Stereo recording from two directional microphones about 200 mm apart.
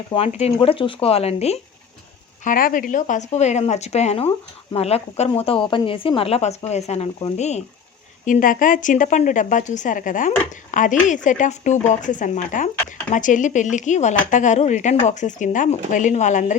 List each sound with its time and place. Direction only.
0.1 s speech: 30° left (ahead or behind)
2.4 s speech: 45° left (ahead or behind)